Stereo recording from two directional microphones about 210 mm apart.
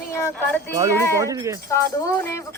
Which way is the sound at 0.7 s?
15° right (ahead or behind).